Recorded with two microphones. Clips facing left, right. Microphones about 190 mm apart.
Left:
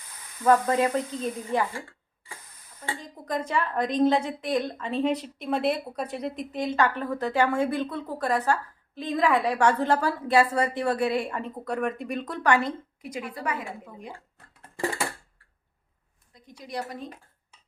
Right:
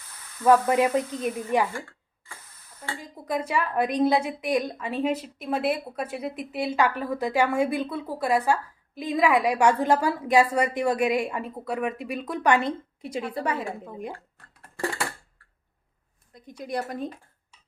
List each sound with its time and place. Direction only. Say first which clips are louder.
0.0 s sizzle: even; 15° left (ahead or behind)
0.7 s a woman's voice: right 2 dB; 15° right (ahead or behind)
3.0 s a woman's voice: right 3 dB; 10° right (ahead or behind); by 13.7 s 30° right (ahead or behind)
16.3 s a woman's voice: right 4 dB; 50° right (ahead or behind)